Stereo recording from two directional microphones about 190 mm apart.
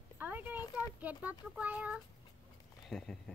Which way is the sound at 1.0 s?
10° right (ahead or behind).